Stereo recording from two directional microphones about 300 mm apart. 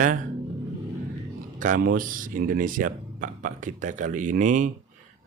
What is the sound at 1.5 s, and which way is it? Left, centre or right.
Speech, right.